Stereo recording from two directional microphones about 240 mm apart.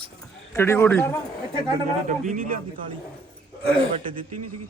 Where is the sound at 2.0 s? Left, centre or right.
Right.